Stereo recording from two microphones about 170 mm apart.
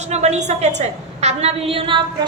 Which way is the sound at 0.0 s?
40° right (ahead or behind).